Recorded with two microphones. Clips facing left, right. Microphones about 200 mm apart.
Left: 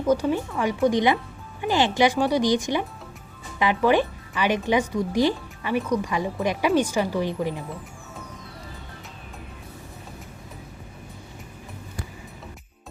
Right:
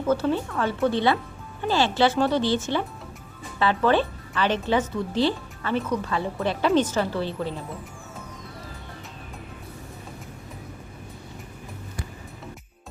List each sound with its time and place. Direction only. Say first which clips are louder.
0.0 s speech: left 1 dB; 15° left (ahead or behind)